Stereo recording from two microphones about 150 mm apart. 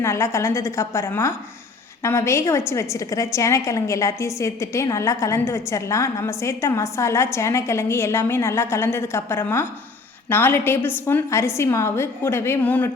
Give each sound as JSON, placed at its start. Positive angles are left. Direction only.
{"t": 0.0, "sound": "a woman's voice", "side_deg": 20}